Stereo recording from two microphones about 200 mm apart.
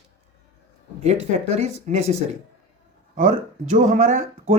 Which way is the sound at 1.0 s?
35° right (ahead or behind).